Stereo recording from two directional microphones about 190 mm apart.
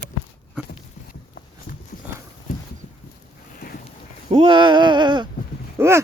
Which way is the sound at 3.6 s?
50° left (ahead or behind).